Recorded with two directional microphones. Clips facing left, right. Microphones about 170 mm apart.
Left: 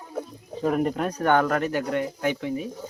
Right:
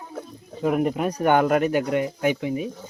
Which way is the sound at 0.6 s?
10° right (ahead or behind).